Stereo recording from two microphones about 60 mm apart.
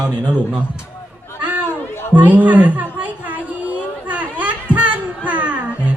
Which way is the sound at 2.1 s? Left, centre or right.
Right.